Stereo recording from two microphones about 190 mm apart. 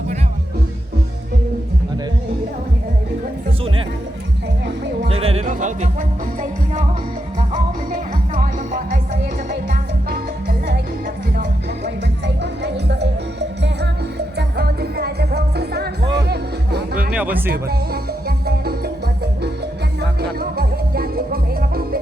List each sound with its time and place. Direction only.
5.0 s music: 30° right (ahead or behind)
9.5 s music: 55° right (ahead or behind)
12.2 s music: 65° right (ahead or behind)
14.3 s music: 60° right (ahead or behind)
17.1 s speech: 5° right (ahead or behind)
17.5 s music: 55° right (ahead or behind)
20.0 s music: 55° right (ahead or behind)